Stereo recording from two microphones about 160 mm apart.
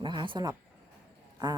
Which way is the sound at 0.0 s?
30° right (ahead or behind).